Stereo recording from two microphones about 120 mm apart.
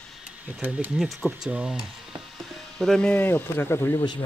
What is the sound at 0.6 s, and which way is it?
Speech, 15° right (ahead or behind).